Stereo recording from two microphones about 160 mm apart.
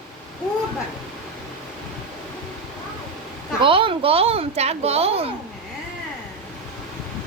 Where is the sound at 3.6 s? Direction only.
35° right (ahead or behind).